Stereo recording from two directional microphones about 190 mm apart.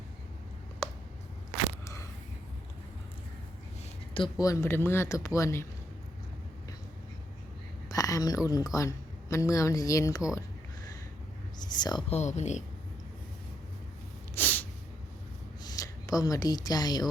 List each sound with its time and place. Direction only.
1.8 s a sound: 15° left (ahead or behind)
4.1 s speech: 20° left (ahead or behind)
7.9 s a woman's voice: 20° left (ahead or behind)
11.8 s speech: 20° left (ahead or behind)
12.1 s speech: 35° left (ahead or behind)
14.3 s snort: 10° left (ahead or behind)
15.6 s speech: 15° left (ahead or behind)